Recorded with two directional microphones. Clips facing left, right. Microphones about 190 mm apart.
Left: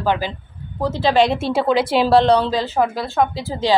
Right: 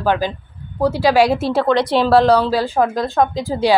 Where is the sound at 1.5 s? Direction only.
5° left (ahead or behind).